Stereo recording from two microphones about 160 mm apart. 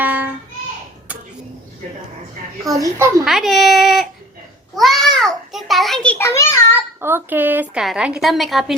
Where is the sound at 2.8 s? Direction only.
20° right (ahead or behind).